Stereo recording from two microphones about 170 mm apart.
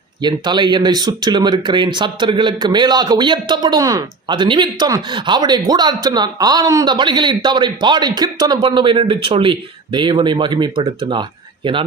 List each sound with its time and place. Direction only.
0.2 s speech: 25° right (ahead or behind)